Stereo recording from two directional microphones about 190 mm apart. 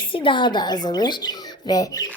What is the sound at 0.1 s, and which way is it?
Speech, 25° left (ahead or behind).